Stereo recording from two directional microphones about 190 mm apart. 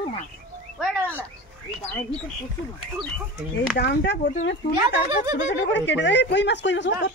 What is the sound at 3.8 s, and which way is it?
Speech, 60° left (ahead or behind).